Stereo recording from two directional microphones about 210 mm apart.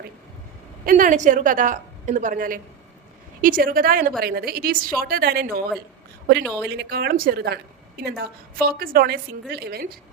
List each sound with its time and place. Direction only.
0.9 s a woman's voice: 40° right (ahead or behind)
6.4 s a woman's voice: 5° left (ahead or behind)
6.7 s a woman's voice: 50° right (ahead or behind)